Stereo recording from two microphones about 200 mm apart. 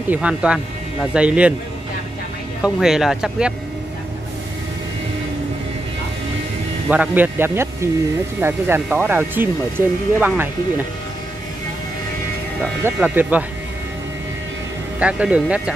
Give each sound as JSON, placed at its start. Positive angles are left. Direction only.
{"t": 0.1, "sound": "speech", "side_deg": -5}
{"t": 2.6, "sound": "speech", "side_deg": 0}
{"t": 6.9, "sound": "speech", "side_deg": -10}
{"t": 12.8, "sound": "speech", "side_deg": -10}
{"t": 15.0, "sound": "speech", "side_deg": -5}